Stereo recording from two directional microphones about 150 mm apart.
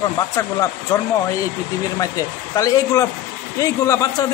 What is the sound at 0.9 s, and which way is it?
Speech, 20° left (ahead or behind).